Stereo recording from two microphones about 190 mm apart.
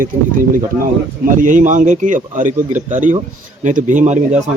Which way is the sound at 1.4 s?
45° right (ahead or behind).